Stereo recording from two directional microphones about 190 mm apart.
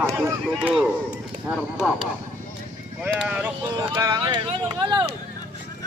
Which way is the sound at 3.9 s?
20° right (ahead or behind).